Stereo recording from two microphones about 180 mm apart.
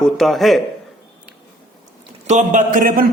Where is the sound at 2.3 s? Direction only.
40° right (ahead or behind).